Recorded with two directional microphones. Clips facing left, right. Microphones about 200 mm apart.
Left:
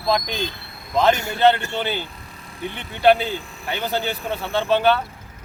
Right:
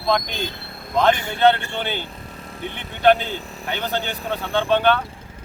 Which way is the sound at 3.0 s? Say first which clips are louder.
Even; 5° left (ahead or behind).